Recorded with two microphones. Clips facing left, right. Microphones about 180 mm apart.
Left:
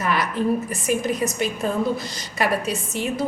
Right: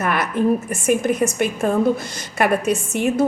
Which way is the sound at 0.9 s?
55° right (ahead or behind).